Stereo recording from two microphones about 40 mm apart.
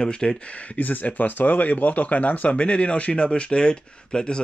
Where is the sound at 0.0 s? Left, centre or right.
Centre.